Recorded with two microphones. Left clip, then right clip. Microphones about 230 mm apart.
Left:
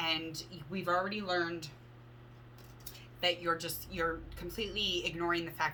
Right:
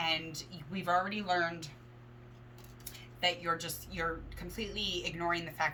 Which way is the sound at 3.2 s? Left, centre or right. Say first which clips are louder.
Even; centre.